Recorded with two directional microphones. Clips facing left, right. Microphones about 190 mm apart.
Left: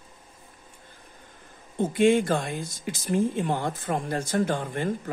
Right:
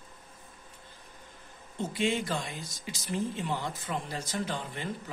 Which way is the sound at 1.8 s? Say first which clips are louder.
Left 10 dB; 50° left (ahead or behind).